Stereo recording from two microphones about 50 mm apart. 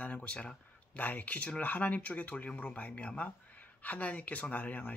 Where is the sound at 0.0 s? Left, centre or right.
Left.